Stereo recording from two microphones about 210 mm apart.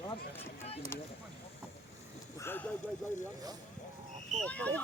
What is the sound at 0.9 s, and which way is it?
Speech, 10° left (ahead or behind).